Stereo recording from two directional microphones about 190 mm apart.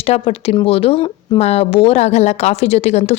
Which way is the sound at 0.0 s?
35° left (ahead or behind).